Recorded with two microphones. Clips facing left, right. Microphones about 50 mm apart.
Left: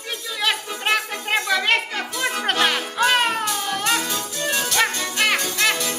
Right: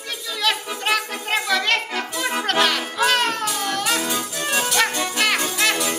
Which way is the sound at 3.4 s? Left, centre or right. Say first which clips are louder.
Even; centre.